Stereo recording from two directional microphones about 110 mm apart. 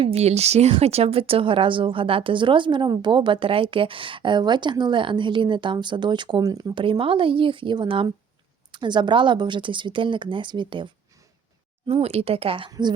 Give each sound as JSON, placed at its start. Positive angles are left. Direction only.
{"t": 0.0, "sound": "speech", "side_deg": -75}
{"t": 6.4, "sound": "speech", "side_deg": -35}
{"t": 6.7, "sound": "speech", "side_deg": -50}
{"t": 11.9, "sound": "speech", "side_deg": -70}